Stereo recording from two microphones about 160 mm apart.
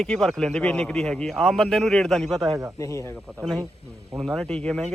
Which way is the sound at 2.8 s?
20° left (ahead or behind).